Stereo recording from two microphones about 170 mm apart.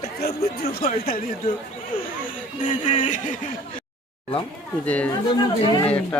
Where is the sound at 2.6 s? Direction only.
30° left (ahead or behind).